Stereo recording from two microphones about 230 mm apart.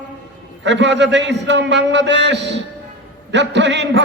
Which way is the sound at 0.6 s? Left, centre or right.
Right.